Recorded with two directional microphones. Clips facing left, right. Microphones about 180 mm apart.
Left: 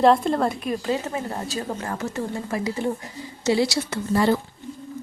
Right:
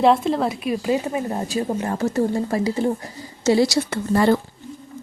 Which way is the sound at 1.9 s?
35° right (ahead or behind).